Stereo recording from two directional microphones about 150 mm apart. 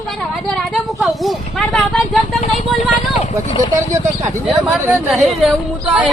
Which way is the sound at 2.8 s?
45° left (ahead or behind).